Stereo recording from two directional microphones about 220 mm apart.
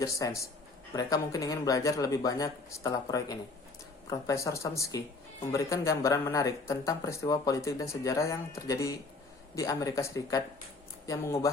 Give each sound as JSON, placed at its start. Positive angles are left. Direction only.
{"t": 0.0, "sound": "speech", "side_deg": 15}